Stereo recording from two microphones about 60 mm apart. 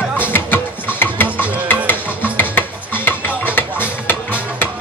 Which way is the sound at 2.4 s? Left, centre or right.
Left.